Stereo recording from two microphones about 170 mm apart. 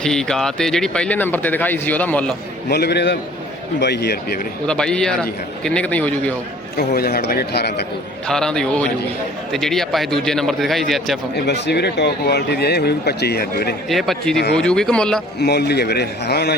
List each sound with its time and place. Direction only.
0.0 s speech: 5° left (ahead or behind)
2.6 s speech: 70° left (ahead or behind)
4.6 s a man's voice: 5° left (ahead or behind)
6.7 s speech: 65° left (ahead or behind)
8.3 s a man's voice: 5° left (ahead or behind)
11.4 s speech: 90° left; by 13.7 s 65° left (ahead or behind)
13.8 s a man's voice: centre (ahead or behind)
15.4 s speech: 70° left (ahead or behind)